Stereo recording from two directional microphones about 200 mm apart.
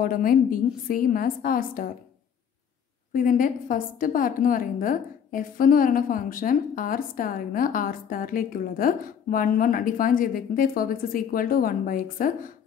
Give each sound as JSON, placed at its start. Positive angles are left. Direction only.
{"t": 0.0, "sound": "a woman's voice", "side_deg": 45}
{"t": 3.1, "sound": "a woman's voice", "side_deg": 40}